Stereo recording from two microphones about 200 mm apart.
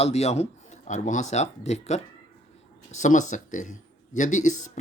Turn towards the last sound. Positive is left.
turn(degrees=40)  # may be behind; listen again after turning